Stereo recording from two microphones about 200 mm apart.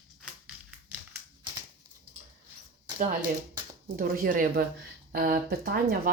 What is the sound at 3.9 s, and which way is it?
Speech, 45° right (ahead or behind).